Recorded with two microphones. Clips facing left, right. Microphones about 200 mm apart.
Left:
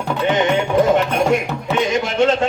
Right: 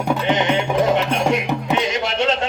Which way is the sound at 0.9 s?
50° left (ahead or behind).